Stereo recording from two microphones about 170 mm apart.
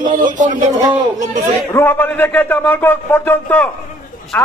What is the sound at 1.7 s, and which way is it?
A man's voice, 10° left (ahead or behind).